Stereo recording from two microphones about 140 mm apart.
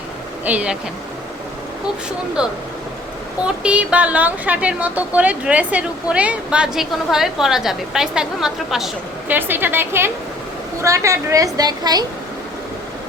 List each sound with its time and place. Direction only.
0.4 s a woman's voice: 10° right (ahead or behind)
2.4 s a woman's voice: 5° right (ahead or behind)
9.3 s a woman's voice: 15° right (ahead or behind)